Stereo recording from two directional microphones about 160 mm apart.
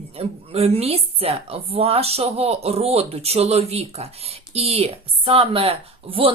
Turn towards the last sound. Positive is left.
turn(degrees=-35)  # may be behind; listen again after turning